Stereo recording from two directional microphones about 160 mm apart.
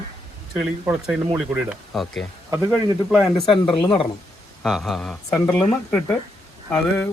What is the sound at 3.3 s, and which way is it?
Speech, 30° left (ahead or behind).